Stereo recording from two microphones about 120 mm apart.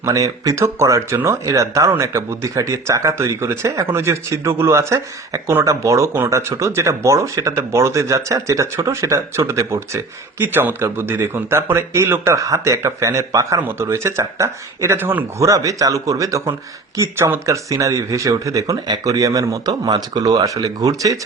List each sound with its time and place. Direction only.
0.0 s speech: 25° right (ahead or behind)
15.4 s speech: 30° right (ahead or behind)